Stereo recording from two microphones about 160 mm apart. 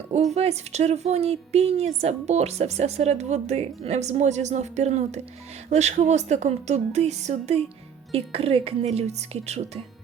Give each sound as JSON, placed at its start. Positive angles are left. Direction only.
{"t": 0.1, "sound": "speech", "side_deg": -45}